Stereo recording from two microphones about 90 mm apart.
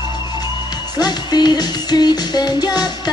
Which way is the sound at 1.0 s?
50° left (ahead or behind).